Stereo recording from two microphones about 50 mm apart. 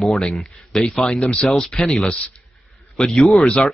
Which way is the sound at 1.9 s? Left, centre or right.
Left.